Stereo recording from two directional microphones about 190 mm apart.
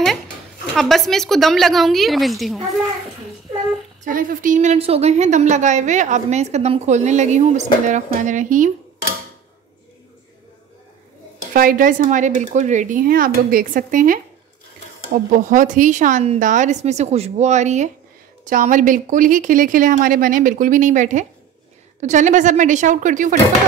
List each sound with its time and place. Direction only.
0.7 s a woman's voice: centre (ahead or behind)
4.0 s a woman's voice: 45° right (ahead or behind)
11.5 s a woman's voice: 45° right (ahead or behind)